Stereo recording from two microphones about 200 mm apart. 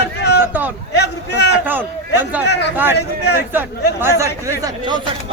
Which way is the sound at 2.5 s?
60° left (ahead or behind).